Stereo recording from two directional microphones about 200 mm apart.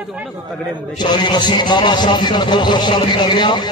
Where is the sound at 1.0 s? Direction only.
20° left (ahead or behind).